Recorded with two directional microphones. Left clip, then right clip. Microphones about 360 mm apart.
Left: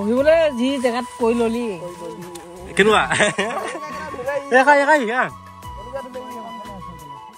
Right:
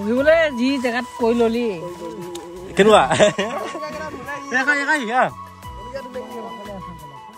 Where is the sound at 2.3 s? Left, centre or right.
Centre.